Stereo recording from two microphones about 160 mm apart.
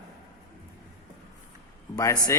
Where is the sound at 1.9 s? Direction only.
20° left (ahead or behind).